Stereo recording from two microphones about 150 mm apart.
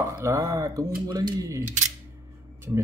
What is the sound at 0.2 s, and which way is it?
Speech, 20° right (ahead or behind).